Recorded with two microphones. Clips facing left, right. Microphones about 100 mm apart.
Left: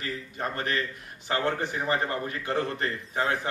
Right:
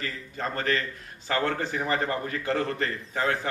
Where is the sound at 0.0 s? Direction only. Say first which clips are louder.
Even; 15° left (ahead or behind).